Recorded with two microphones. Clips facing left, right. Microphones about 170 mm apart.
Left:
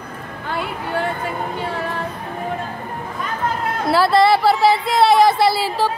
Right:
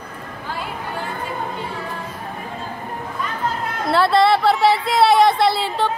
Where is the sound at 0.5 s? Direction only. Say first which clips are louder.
Left 4 dB; 65° left (ahead or behind).